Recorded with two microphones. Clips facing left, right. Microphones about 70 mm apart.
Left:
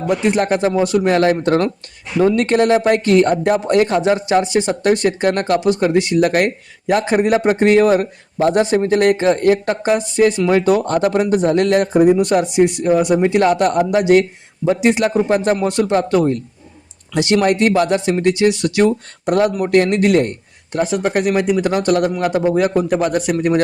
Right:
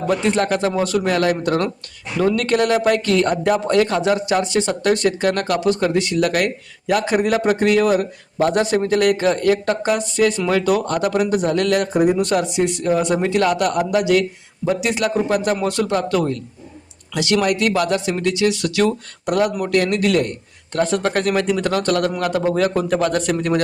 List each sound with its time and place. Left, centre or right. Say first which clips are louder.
0.1 s speech: left 3 dB; left
20.7 s speech: left 1 dB; centre